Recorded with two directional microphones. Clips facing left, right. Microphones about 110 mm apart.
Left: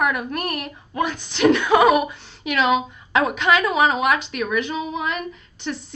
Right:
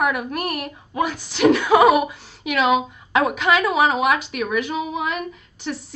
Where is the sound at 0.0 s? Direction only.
10° right (ahead or behind).